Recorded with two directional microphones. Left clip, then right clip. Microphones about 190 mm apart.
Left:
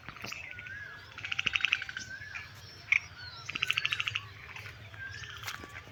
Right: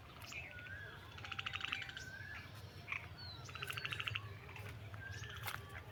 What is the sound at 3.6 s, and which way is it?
Bird, 35° right (ahead or behind).